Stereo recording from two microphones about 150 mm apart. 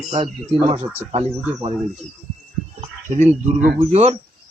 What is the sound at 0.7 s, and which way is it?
Speech, 45° right (ahead or behind).